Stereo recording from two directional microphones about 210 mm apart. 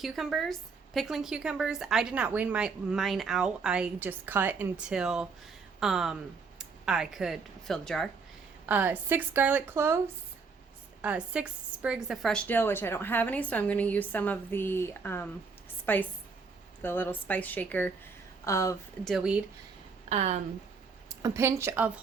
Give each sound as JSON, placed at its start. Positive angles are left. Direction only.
{"t": 0.0, "sound": "a woman's voice", "side_deg": 0}
{"t": 8.6, "sound": "a woman's voice", "side_deg": -10}
{"t": 11.0, "sound": "a woman's voice", "side_deg": -5}
{"t": 19.0, "sound": "a woman's voice", "side_deg": 0}
{"t": 20.1, "sound": "speech", "side_deg": -30}
{"t": 21.2, "sound": "a woman's voice", "side_deg": -15}